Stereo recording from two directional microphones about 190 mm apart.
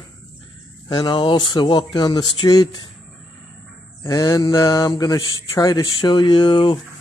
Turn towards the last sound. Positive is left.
turn(degrees=25)  # may be behind; listen again after turning